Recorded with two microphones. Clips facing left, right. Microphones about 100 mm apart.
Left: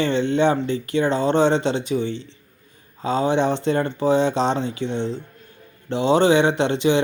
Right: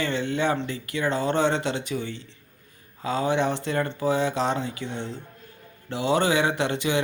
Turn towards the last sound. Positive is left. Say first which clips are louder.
# left 6 dB
turn(degrees=25)  # may be behind; listen again after turning